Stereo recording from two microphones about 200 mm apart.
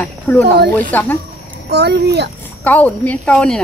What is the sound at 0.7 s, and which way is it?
Speech, 10° left (ahead or behind).